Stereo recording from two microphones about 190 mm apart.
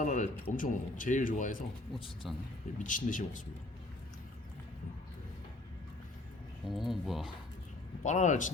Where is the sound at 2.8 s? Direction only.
45° left (ahead or behind).